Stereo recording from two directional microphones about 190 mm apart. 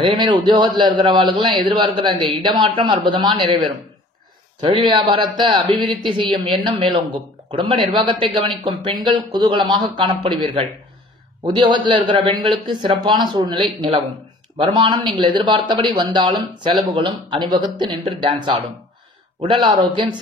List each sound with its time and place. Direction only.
0.0 s speech: 25° right (ahead or behind)